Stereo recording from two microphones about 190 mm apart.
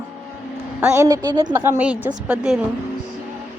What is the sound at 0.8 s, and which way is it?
A woman's voice, 15° right (ahead or behind).